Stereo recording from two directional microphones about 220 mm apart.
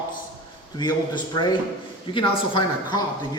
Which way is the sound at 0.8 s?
20° left (ahead or behind).